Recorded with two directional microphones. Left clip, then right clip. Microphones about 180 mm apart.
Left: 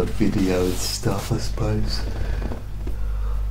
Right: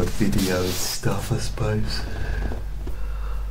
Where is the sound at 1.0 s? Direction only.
20° left (ahead or behind).